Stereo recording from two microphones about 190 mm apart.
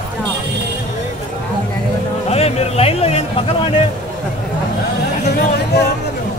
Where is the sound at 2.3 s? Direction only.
30° left (ahead or behind).